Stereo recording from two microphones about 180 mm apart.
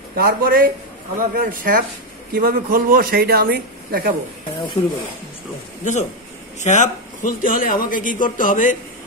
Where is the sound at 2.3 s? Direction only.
55° right (ahead or behind).